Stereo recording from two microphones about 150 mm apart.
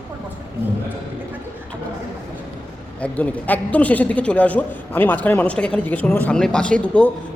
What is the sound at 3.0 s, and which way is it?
A man's voice, 10° left (ahead or behind).